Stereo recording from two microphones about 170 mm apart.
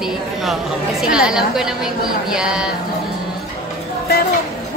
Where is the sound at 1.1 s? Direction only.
5° right (ahead or behind).